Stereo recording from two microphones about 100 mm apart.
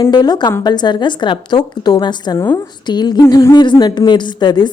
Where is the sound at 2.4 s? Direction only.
25° left (ahead or behind).